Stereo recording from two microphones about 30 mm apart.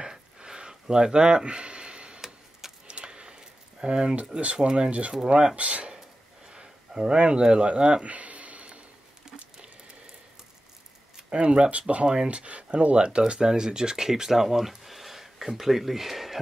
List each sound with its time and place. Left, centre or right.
0.0 s a sound: right
4.7 s speech: right
5.6 s speech: right
6.5 s speech: right
8.0 s a sound: right
11.2 s speech: right
12.3 s speech: right
12.9 s speech: right; by 14.9 s centre
14.9 s a sound: centre